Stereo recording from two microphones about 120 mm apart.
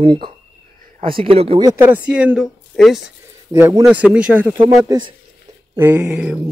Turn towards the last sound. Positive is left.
turn(degrees=-10)  # may be behind; listen again after turning